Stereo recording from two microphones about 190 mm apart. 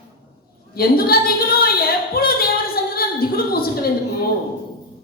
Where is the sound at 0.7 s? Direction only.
50° left (ahead or behind).